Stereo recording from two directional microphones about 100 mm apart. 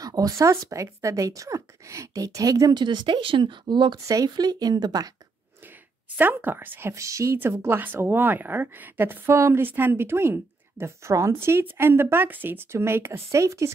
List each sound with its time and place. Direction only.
0.0 s speech: 40° right (ahead or behind)
2.7 s speech: 50° right (ahead or behind)
4.1 s speech: 40° right (ahead or behind)
6.1 s a woman's voice: 20° right (ahead or behind)